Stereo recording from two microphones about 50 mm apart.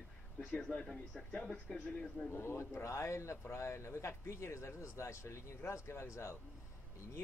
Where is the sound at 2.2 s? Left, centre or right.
Left.